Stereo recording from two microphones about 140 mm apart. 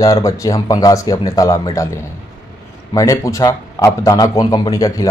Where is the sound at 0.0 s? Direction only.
25° left (ahead or behind).